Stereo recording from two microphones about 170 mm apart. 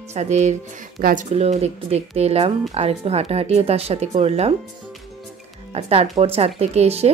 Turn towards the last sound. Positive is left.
turn(degrees=-40)  # may be behind; listen again after turning